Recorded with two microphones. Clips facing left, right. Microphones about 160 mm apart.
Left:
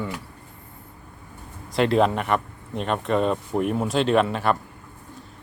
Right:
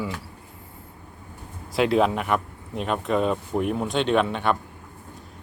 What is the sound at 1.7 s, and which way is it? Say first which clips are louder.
Speech: left 1 dB; centre (ahead or behind).